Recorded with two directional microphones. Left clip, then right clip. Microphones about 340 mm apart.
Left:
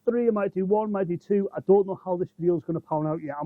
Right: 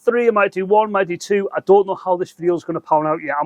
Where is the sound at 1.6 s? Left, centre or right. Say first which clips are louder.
Right 7 dB; right.